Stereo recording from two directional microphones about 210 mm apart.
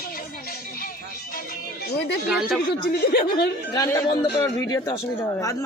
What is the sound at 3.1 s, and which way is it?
Speech, 45° left (ahead or behind).